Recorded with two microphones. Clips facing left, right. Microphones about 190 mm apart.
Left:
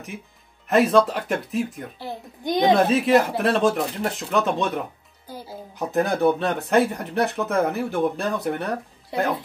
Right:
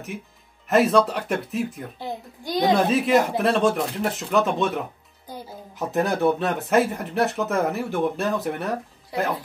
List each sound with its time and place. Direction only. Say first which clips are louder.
0.7 s speech: left 1 dB; centre (ahead or behind)
2.4 s a woman's voice: left 2 dB; 20° left (ahead or behind)
2.7 s speech: left 1 dB; centre (ahead or behind)
5.8 s speech: left 1 dB; centre (ahead or behind)